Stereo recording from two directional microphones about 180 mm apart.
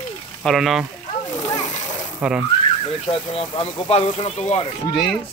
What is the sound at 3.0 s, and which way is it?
Speech, 30° left (ahead or behind).